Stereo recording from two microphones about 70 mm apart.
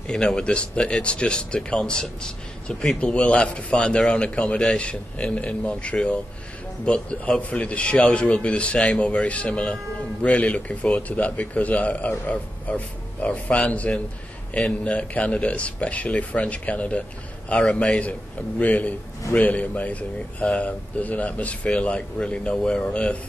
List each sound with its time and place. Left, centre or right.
0.0 s a man's voice: centre